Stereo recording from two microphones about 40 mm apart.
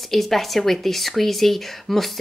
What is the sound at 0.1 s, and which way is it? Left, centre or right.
Speech, centre.